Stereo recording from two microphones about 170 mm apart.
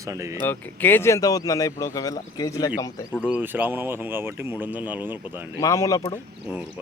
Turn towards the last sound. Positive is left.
turn(degrees=20)  # may be behind; listen again after turning